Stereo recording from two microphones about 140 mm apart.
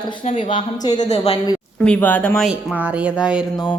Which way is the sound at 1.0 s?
45° left (ahead or behind).